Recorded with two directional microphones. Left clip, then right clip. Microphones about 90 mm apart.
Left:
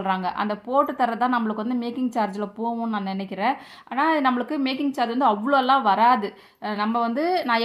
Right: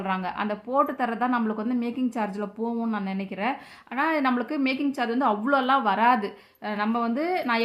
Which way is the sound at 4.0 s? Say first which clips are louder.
Left 3 dB; 40° left (ahead or behind).